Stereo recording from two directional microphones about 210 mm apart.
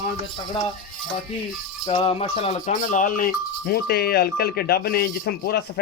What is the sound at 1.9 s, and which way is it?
Speech, 30° left (ahead or behind).